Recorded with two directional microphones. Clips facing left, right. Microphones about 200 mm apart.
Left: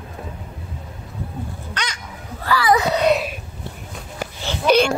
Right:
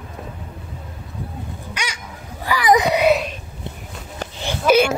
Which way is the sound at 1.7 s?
10° right (ahead or behind).